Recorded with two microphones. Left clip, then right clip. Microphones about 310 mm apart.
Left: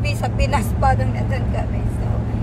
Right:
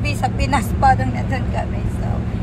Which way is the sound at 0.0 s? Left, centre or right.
Centre.